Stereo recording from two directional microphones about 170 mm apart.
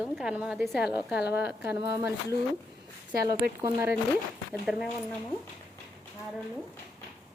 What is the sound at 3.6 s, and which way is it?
Speech, 15° right (ahead or behind).